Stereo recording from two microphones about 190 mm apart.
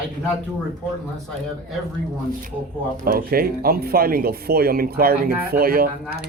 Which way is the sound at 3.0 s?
50° right (ahead or behind).